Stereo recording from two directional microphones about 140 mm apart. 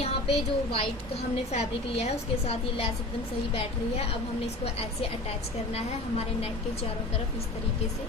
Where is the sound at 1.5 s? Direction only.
50° left (ahead or behind).